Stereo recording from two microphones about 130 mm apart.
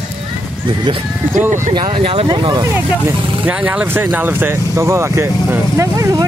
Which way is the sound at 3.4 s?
10° right (ahead or behind).